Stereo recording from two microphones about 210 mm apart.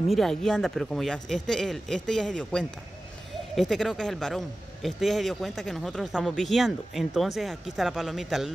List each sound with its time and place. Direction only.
0.1 s speech: centre (ahead or behind)